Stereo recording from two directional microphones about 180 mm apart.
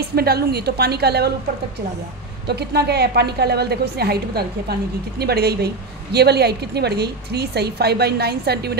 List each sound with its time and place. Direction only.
0.1 s a woman's voice: 60° right (ahead or behind)
2.4 s a woman's voice: 65° right (ahead or behind)